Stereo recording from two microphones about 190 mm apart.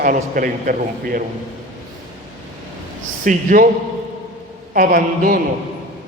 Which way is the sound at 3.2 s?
45° right (ahead or behind).